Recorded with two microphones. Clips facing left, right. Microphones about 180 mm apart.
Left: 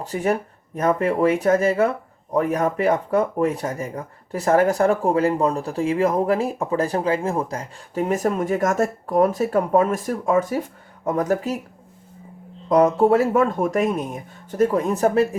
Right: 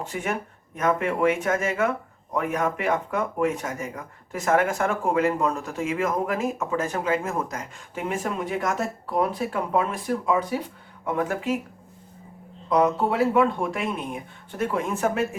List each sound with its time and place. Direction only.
0.0 s speech: 35° left (ahead or behind)
12.6 s speech: 45° left (ahead or behind)